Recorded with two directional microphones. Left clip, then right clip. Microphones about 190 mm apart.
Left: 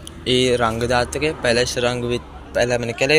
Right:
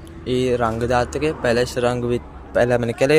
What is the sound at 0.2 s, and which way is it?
Speech, 10° right (ahead or behind).